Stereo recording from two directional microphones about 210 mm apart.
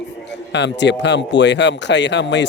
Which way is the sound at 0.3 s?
55° left (ahead or behind).